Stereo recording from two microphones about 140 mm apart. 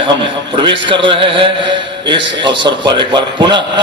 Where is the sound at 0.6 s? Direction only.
35° right (ahead or behind).